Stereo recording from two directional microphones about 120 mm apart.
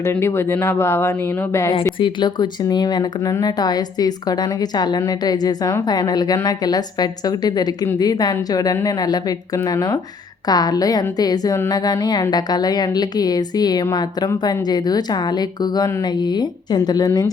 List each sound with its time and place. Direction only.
0.0 s speech: 20° left (ahead or behind)
2.0 s a woman's voice: 40° left (ahead or behind)